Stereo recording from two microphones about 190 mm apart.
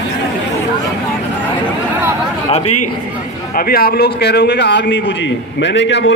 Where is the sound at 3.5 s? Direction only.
50° left (ahead or behind).